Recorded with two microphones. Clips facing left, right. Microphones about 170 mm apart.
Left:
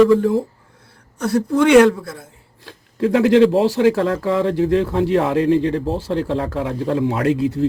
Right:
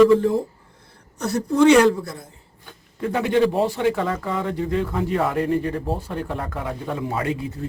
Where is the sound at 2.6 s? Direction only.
85° left.